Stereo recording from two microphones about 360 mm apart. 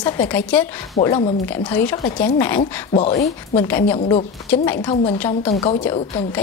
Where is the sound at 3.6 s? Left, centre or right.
Centre.